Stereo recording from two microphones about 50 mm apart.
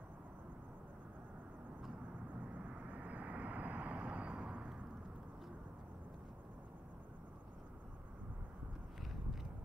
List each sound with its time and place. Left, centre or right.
2.9 s vehicle: right